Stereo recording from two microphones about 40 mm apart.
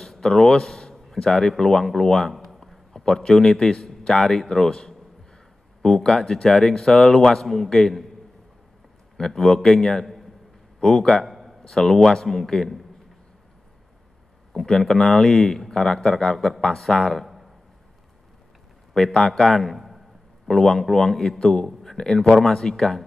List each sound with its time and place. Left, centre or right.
0.0 s a man's voice: centre
2.3 s a sound: centre
2.9 s a man's voice: centre
9.1 s a man's voice: centre
11.2 s a sound: centre
11.6 s speech: centre
14.5 s speech: centre
19.1 s a man's voice: centre
20.4 s a man's voice: centre
21.4 s speech: centre